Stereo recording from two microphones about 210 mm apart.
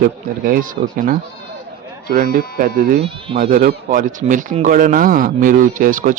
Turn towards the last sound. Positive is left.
turn(degrees=-40)  # may be behind; listen again after turning